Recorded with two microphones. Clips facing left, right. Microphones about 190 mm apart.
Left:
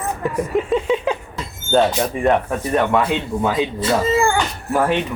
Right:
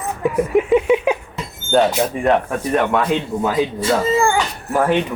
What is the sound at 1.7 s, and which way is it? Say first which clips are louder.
Speech: right 1 dB; 5° right (ahead or behind).